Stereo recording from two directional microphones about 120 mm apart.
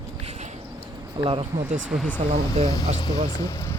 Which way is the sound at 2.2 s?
65° right (ahead or behind).